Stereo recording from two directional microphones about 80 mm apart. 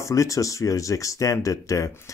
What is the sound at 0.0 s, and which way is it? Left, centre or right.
Speech, left.